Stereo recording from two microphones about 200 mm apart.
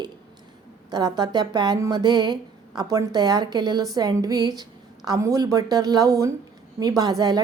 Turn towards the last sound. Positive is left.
turn(degrees=-20)  # may be behind; listen again after turning